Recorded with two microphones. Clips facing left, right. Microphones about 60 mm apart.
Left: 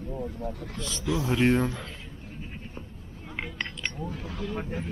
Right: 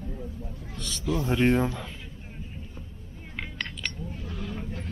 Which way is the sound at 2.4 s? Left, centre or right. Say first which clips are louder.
Left 2 dB; left.